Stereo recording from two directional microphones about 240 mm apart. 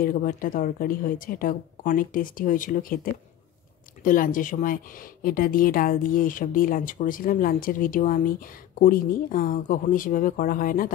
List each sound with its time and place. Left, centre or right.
0.0 s speech: left
4.0 s speech: left